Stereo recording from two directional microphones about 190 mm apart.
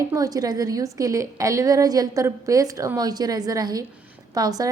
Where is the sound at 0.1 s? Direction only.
20° right (ahead or behind).